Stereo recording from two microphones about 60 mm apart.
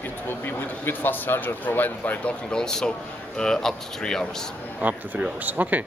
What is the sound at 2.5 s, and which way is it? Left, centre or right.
Speech, centre.